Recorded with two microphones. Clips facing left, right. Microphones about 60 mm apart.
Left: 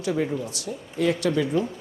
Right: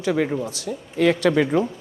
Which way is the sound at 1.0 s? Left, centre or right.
Right.